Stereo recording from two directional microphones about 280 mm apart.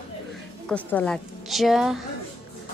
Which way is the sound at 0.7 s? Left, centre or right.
Centre.